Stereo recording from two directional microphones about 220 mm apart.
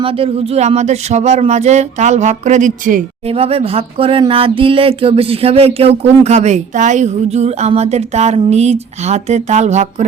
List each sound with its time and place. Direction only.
0.0 s speech: 25° right (ahead or behind)